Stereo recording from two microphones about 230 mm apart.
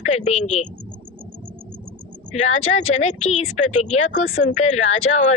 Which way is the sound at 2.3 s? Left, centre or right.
Left.